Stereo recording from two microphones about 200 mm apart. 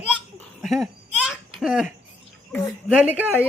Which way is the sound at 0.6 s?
Centre (ahead or behind).